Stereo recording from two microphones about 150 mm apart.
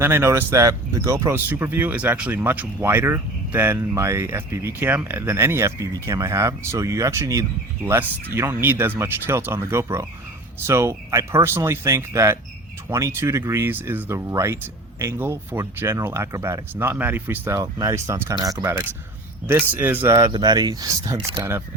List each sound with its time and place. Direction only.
0.0 s speech: 15° right (ahead or behind)